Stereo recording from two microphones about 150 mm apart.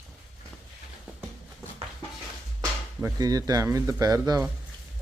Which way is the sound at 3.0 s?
25° right (ahead or behind).